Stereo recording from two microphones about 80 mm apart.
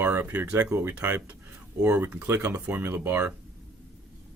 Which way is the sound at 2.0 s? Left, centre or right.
Right.